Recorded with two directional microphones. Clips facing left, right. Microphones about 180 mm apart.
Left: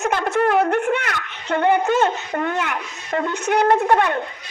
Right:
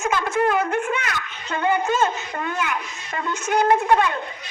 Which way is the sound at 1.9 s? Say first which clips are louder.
Left 3 dB; 65° left (ahead or behind).